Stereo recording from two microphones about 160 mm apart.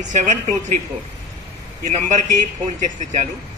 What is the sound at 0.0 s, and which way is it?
Speech, 50° right (ahead or behind).